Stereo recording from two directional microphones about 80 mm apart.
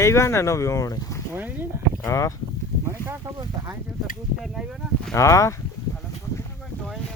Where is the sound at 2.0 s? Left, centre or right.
Left.